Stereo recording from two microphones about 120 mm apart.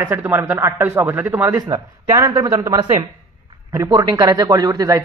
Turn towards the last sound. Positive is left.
turn(degrees=-30)  # may be behind; listen again after turning